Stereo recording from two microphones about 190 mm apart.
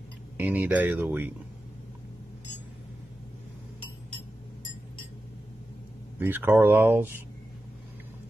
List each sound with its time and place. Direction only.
0.4 s speech: 10° right (ahead or behind)
6.1 s speech: 10° right (ahead or behind)